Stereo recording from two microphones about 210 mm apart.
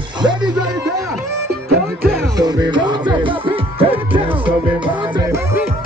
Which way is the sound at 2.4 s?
20° right (ahead or behind).